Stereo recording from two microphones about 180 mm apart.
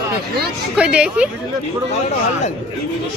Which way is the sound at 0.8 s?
5° right (ahead or behind).